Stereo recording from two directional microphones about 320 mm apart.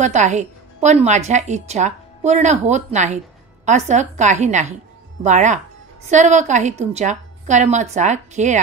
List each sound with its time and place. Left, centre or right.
0.0 s a woman's voice: right